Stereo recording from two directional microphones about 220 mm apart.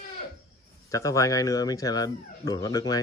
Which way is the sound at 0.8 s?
15° left (ahead or behind).